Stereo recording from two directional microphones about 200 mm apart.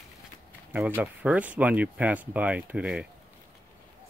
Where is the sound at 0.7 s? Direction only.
10° right (ahead or behind).